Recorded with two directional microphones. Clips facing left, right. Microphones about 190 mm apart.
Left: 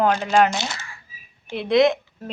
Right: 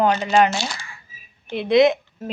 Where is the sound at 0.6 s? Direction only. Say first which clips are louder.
Right 1 dB; 25° left (ahead or behind).